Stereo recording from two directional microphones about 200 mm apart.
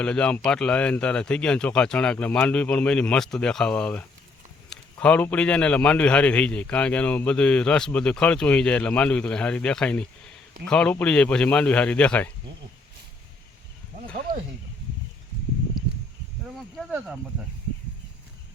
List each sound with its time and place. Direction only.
0.0 s a man's voice: 5° left (ahead or behind)
13.9 s a sound: 30° right (ahead or behind)
16.7 s speech: 5° right (ahead or behind)